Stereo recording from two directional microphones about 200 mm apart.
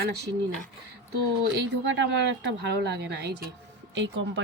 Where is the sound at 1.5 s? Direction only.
60° right (ahead or behind).